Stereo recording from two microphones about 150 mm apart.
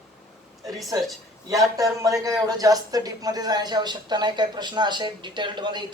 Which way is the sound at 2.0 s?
20° right (ahead or behind).